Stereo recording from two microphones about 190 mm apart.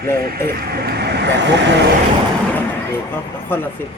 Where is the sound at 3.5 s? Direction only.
10° left (ahead or behind).